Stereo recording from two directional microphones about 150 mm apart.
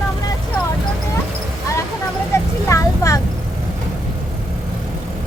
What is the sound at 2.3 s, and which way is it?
Vehicle, 20° left (ahead or behind).